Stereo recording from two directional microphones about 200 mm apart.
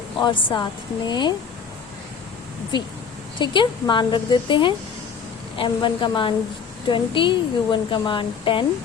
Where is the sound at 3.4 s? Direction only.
25° left (ahead or behind).